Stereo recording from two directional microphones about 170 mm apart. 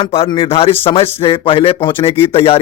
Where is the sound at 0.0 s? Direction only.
35° left (ahead or behind).